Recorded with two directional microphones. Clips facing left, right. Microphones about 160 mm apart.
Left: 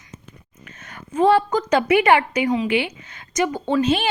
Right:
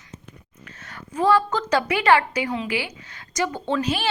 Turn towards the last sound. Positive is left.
turn(degrees=15)  # may be behind; listen again after turning